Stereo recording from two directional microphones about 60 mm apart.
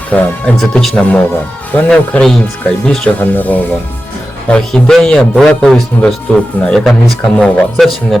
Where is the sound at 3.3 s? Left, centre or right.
Left.